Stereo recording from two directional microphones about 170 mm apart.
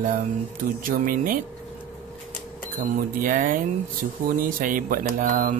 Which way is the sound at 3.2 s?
55° right (ahead or behind).